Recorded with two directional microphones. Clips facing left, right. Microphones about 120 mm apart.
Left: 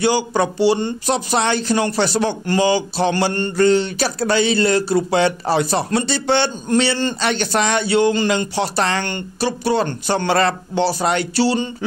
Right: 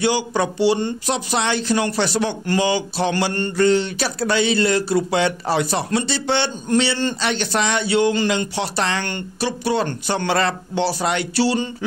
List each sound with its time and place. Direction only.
0.0 s speech: 40° left (ahead or behind)